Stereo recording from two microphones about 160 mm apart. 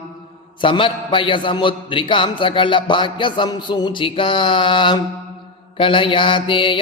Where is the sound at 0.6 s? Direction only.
30° left (ahead or behind).